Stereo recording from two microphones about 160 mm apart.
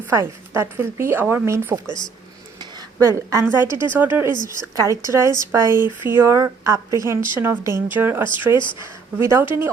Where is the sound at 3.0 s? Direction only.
20° right (ahead or behind).